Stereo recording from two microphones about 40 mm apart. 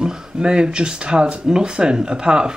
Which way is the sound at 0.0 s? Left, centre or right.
Centre.